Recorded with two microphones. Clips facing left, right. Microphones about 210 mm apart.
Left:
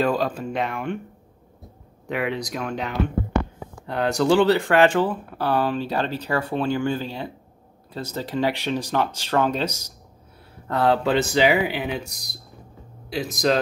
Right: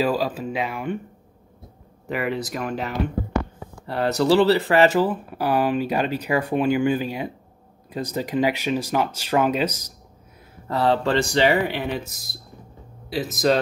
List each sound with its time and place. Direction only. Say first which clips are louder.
0.0 s speech: even; 5° right (ahead or behind)
2.0 s speech: even; centre (ahead or behind)
9.7 s speech: right 2 dB; 10° left (ahead or behind)
10.7 s speech: even; centre (ahead or behind)